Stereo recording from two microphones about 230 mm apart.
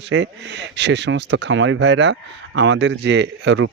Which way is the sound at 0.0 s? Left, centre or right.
Right.